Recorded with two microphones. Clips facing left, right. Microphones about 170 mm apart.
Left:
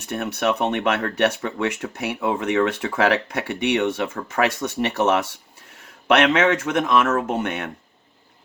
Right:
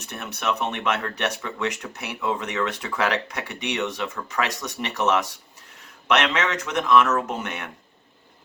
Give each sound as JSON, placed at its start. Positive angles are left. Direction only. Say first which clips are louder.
{"t": 0.0, "sound": "speech", "louder": "left 6 dB", "side_deg": 55}